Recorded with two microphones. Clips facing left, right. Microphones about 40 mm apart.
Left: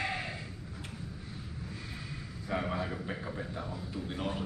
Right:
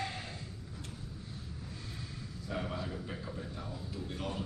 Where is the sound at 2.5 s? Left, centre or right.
Left.